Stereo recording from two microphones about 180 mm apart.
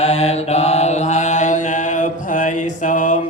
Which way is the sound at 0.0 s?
35° left (ahead or behind).